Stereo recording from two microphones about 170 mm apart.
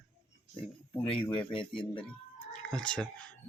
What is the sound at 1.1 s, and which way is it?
Speech, 30° left (ahead or behind).